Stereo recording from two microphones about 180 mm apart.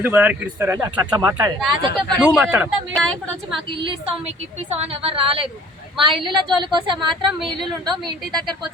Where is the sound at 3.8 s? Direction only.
30° right (ahead or behind).